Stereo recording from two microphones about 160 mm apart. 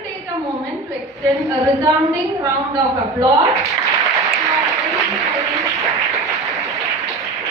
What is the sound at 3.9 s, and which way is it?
Applause, centre (ahead or behind).